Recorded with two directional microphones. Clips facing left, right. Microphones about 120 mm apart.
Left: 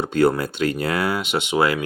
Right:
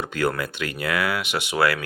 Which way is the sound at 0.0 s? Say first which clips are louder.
Left 6 dB; 30° left (ahead or behind).